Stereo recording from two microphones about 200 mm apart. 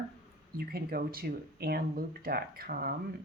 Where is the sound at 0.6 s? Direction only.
50° right (ahead or behind).